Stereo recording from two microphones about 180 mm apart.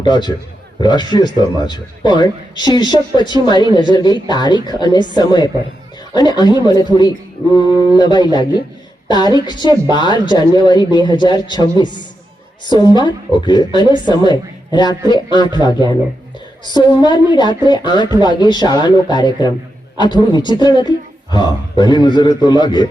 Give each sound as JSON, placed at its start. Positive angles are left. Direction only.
{"t": 0.0, "sound": "a man's voice", "side_deg": 25}
{"t": 17.0, "sound": "a man's voice", "side_deg": 25}